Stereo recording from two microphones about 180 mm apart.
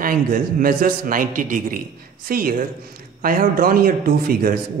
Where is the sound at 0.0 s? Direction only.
50° right (ahead or behind).